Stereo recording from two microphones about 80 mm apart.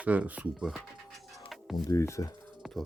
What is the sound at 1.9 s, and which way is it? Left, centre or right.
Speech, left.